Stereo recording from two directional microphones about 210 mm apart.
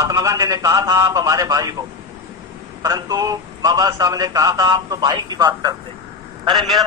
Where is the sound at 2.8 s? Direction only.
15° right (ahead or behind).